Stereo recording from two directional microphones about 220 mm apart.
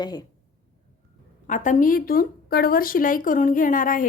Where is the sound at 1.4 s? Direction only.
35° left (ahead or behind).